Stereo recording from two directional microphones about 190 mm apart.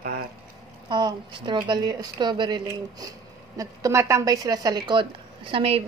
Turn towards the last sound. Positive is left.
turn(degrees=-30)  # may be behind; listen again after turning